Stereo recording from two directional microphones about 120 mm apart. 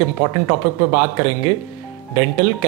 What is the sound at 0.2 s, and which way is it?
Speech, 25° right (ahead or behind).